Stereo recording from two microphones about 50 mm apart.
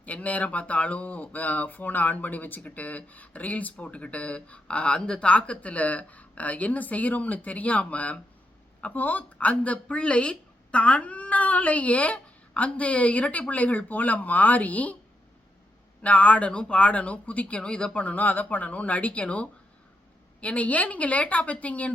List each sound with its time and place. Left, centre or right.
0.0 s speech: left
16.0 s speech: left